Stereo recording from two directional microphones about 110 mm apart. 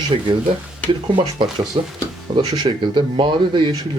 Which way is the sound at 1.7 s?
50° right (ahead or behind).